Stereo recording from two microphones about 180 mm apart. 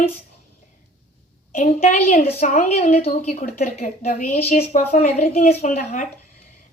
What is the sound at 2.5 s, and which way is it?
A woman's voice, 45° left (ahead or behind).